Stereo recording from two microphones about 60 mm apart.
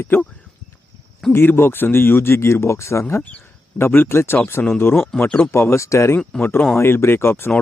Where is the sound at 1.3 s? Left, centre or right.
Left.